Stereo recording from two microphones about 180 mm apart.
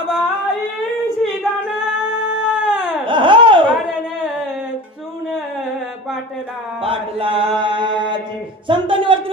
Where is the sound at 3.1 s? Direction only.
25° right (ahead or behind).